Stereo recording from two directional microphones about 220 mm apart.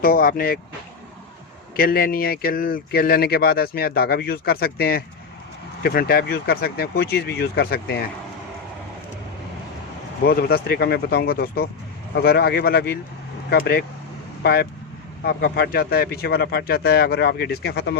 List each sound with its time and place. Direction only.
0.0 s speech: 40° left (ahead or behind)
1.7 s speech: 40° left (ahead or behind)
10.2 s speech: 45° left (ahead or behind)